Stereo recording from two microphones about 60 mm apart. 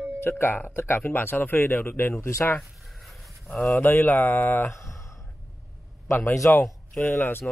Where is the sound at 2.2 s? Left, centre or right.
Left.